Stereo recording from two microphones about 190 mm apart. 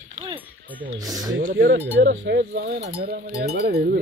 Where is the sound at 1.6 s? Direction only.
80° right.